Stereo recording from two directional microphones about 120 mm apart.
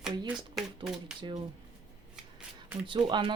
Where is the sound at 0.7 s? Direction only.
40° right (ahead or behind).